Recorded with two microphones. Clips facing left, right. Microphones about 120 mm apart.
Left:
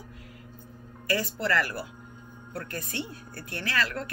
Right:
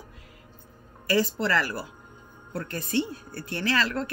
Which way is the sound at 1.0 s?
25° right (ahead or behind).